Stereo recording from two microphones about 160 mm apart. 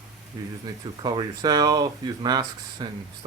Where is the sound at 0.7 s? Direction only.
25° right (ahead or behind).